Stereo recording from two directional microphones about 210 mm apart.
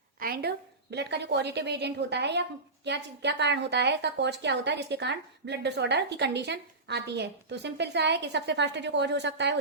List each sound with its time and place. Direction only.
0.2 s a woman's voice: 50° right (ahead or behind)